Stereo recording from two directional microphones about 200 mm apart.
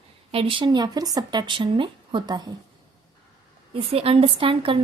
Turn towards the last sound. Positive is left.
turn(degrees=-25)  # may be behind; listen again after turning